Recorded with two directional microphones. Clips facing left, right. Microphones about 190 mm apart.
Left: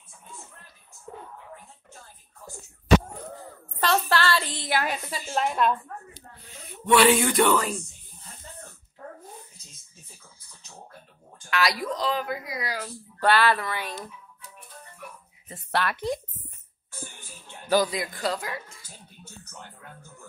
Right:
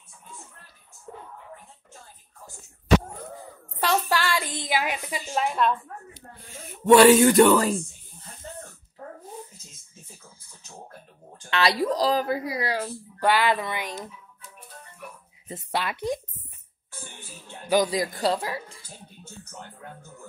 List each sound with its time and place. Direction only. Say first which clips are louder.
3.8 s a sound: left 1 dB; 10° right (ahead or behind)
4.6 s a woman's voice: even; 15° right (ahead or behind)
5.5 s a woman's voice: even; centre (ahead or behind)
6.4 s speech: right 8 dB; 45° right (ahead or behind)
11.5 s speech: right 4 dB; 30° right (ahead or behind)
13.2 s a woman's voice: even; 15° right (ahead or behind)
15.7 s a woman's voice: left 1 dB; 15° right (ahead or behind)
17.8 s speech: right 4 dB; 35° right (ahead or behind)